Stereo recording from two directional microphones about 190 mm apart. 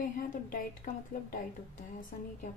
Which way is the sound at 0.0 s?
45° left (ahead or behind).